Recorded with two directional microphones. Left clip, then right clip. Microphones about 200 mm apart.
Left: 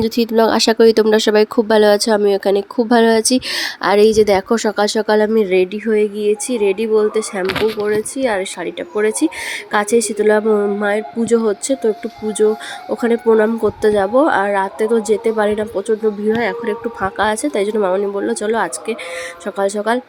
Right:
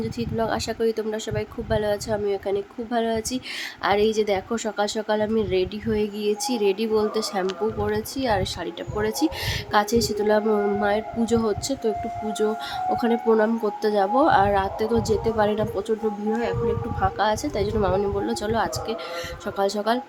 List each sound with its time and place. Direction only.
0.0 s speech: 50° left (ahead or behind); by 15.8 s 20° left (ahead or behind)
16.3 s speech: 35° left (ahead or behind)
17.0 s speech: 25° left (ahead or behind)